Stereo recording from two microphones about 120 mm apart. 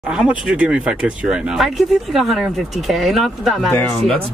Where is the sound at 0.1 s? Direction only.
10° right (ahead or behind).